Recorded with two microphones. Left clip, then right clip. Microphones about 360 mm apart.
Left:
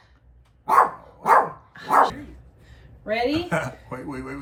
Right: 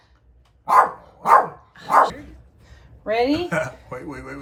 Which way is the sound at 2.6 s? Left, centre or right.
Centre.